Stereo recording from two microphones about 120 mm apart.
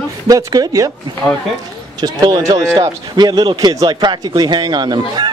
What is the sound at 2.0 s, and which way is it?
Speech, 35° right (ahead or behind).